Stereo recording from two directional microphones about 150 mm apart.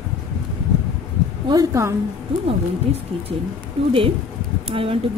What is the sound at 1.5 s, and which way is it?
Speech, 25° right (ahead or behind).